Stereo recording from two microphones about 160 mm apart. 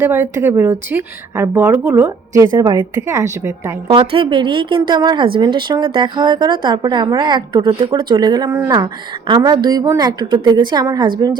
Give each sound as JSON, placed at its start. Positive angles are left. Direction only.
{"t": 0.0, "sound": "speech", "side_deg": -15}
{"t": 3.8, "sound": "a woman's voice", "side_deg": -35}